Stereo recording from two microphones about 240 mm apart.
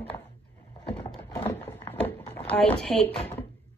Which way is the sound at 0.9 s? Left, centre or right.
Centre.